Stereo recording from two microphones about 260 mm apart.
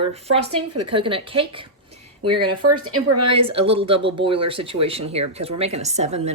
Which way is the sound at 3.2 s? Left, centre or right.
Right.